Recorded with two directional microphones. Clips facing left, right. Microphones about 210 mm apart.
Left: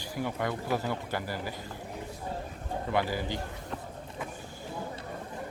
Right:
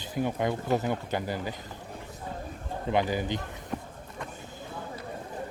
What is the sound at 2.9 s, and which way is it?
Speech, 20° right (ahead or behind).